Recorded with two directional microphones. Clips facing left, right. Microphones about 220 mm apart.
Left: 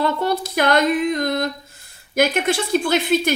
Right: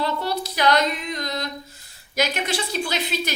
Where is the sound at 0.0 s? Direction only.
50° left (ahead or behind).